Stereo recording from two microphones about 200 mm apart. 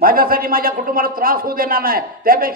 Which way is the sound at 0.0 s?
45° right (ahead or behind).